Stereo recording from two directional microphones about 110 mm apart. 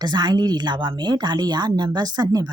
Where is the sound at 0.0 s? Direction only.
40° right (ahead or behind).